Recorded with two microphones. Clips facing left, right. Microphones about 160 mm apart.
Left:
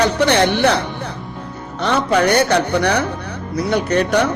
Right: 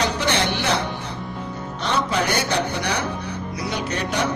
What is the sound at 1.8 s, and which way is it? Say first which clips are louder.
Speech: left 7 dB; 60° left (ahead or behind).